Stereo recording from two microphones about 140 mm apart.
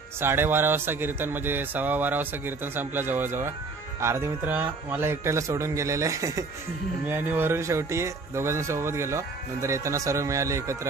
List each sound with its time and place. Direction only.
0.2 s speech: 15° right (ahead or behind)